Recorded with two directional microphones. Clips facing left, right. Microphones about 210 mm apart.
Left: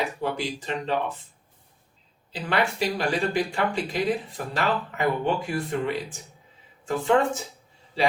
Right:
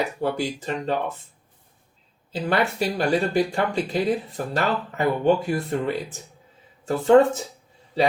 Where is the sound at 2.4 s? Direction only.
40° right (ahead or behind).